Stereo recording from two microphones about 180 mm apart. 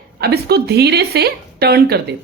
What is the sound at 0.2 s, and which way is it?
Speech, 65° right (ahead or behind).